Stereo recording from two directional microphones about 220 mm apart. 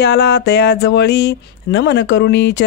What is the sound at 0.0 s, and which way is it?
Speech, 50° left (ahead or behind).